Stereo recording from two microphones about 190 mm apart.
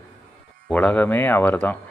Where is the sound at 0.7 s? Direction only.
5° left (ahead or behind).